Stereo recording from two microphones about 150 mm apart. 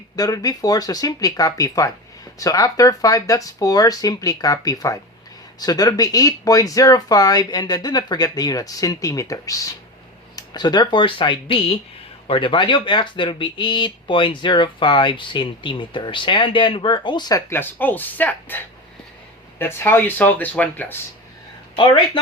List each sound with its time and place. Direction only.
0.2 s speech: 25° left (ahead or behind)
21.8 s speech: 35° left (ahead or behind)